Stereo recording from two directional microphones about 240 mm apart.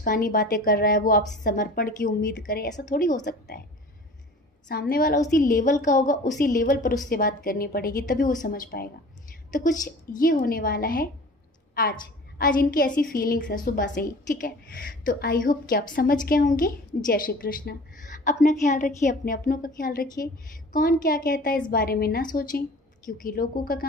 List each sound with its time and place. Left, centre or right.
0.0 s a woman's voice: left
4.6 s a woman's voice: left